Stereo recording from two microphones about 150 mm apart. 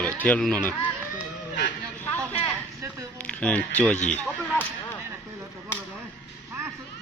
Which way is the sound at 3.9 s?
50° left (ahead or behind).